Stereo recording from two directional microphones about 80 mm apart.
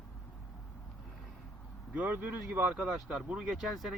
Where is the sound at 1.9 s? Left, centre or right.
Centre.